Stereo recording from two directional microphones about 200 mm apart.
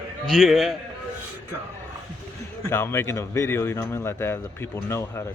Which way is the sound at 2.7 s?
10° left (ahead or behind).